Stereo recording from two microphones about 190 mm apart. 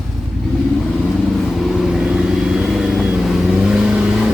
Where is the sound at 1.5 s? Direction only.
Centre (ahead or behind).